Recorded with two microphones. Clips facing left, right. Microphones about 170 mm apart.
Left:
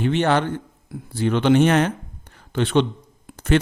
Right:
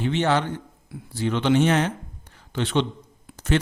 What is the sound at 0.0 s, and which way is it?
A man's voice, 55° left (ahead or behind).